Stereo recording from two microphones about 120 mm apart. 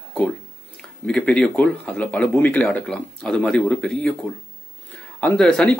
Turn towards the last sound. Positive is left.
turn(degrees=5)  # may be behind; listen again after turning